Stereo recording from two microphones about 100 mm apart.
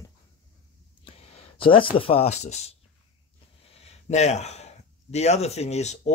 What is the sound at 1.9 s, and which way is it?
Speech, 70° left (ahead or behind).